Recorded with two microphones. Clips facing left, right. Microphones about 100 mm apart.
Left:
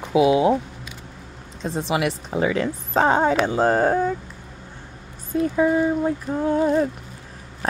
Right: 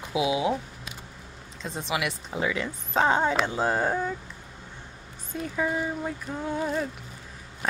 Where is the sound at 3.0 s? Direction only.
50° left (ahead or behind).